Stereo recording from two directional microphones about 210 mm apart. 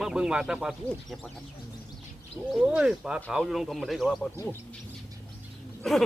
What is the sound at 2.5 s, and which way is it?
Speech, 5° right (ahead or behind).